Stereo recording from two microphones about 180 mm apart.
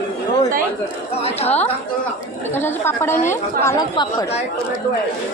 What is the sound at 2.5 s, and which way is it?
A woman's voice, 10° left (ahead or behind).